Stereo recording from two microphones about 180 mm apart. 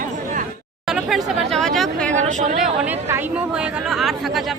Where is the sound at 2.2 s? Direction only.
40° right (ahead or behind).